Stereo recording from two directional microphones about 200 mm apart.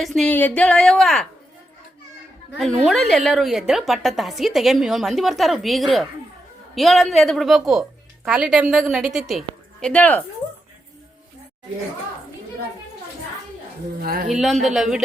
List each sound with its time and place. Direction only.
0.0 s a woman's voice: 5° left (ahead or behind)
2.5 s a woman's voice: centre (ahead or behind)
14.0 s speech: 45° right (ahead or behind)
14.3 s a woman's voice: centre (ahead or behind)